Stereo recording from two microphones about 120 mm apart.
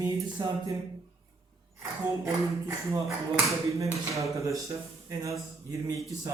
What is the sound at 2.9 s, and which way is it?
Speech, 25° right (ahead or behind).